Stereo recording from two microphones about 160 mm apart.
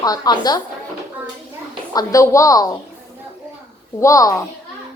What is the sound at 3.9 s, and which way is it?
Speech, 20° left (ahead or behind).